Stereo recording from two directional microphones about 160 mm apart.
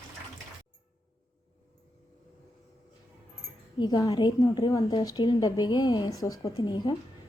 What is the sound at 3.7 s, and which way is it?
A woman's voice, 25° left (ahead or behind).